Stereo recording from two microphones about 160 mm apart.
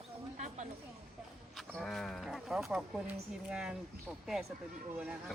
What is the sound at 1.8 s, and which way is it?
Speech, centre (ahead or behind).